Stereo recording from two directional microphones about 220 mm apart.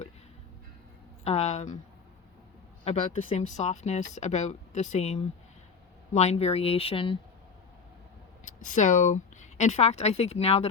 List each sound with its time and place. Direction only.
1.2 s speech: 30° left (ahead or behind)
2.8 s speech: 30° left (ahead or behind)
8.4 s a woman's voice: 35° left (ahead or behind)